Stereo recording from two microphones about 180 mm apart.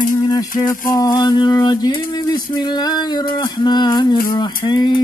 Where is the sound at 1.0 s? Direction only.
20° left (ahead or behind).